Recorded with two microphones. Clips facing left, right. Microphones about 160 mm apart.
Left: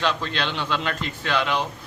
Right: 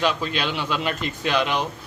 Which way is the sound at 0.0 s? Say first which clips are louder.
Right 2 dB; 10° right (ahead or behind).